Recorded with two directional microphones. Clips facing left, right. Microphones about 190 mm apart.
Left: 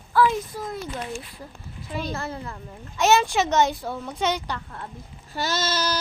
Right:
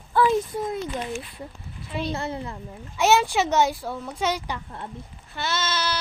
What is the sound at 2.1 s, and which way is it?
Speech, 25° right (ahead or behind).